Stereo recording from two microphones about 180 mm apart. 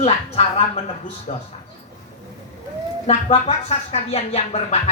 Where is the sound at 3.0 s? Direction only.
35° left (ahead or behind).